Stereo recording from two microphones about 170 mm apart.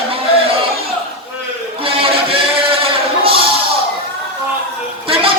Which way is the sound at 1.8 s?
30° right (ahead or behind).